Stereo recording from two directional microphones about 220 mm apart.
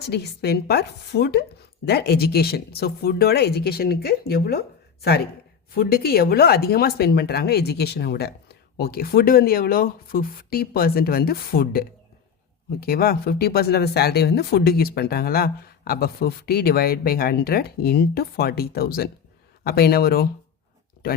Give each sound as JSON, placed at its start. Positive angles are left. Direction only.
{"t": 0.0, "sound": "speech", "side_deg": 50}
{"t": 5.7, "sound": "speech", "side_deg": 45}